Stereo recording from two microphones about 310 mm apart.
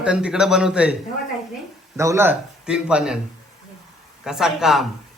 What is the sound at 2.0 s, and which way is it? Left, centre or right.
A man's voice, centre.